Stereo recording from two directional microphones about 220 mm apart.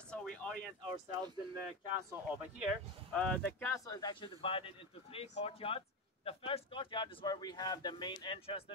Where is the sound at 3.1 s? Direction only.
5° left (ahead or behind).